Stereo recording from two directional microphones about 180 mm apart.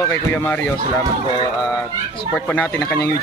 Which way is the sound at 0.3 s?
10° left (ahead or behind).